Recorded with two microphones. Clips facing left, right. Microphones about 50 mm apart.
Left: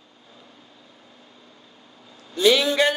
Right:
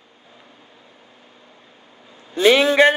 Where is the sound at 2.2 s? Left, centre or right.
Right.